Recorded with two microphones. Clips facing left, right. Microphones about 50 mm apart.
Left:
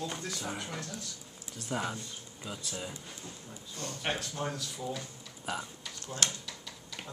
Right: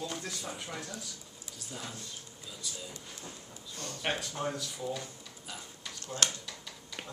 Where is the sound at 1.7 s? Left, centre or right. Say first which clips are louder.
Left 9 dB; left.